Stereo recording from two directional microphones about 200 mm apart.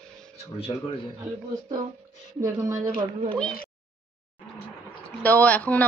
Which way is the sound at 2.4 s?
15° right (ahead or behind).